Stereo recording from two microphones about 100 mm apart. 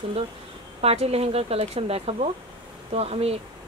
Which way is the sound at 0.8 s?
90° right.